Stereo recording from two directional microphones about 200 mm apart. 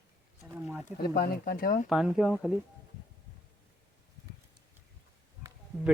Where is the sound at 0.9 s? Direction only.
50° left (ahead or behind).